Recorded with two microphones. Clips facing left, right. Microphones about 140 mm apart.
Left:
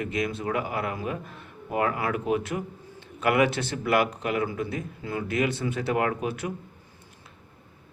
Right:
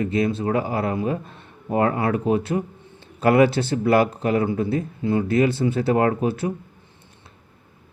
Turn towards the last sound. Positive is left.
turn(degrees=-30)  # may be behind; listen again after turning